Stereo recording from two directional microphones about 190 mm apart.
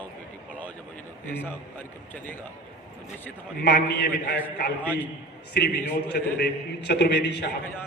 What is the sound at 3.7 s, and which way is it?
Speech, 60° left (ahead or behind).